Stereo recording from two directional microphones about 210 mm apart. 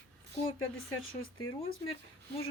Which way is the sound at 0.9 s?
80° left.